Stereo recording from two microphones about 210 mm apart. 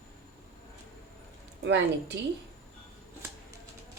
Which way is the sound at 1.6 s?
60° right (ahead or behind).